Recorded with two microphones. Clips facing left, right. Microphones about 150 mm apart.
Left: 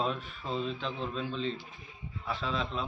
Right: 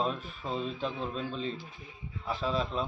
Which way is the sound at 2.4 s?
40° right (ahead or behind).